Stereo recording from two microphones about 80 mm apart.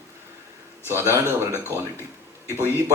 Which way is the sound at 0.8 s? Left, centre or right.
Right.